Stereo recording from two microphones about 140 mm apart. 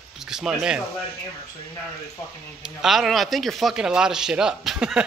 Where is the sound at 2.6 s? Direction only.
5° right (ahead or behind).